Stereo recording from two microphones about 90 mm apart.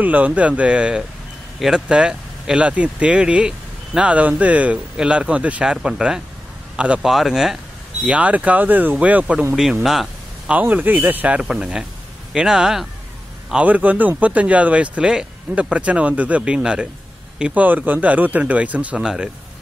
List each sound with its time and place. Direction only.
0.0 s speech: 20° right (ahead or behind)
8.0 s speech: 15° right (ahead or behind)
9.8 s a sound: centre (ahead or behind)
10.5 s speech: 20° right (ahead or behind)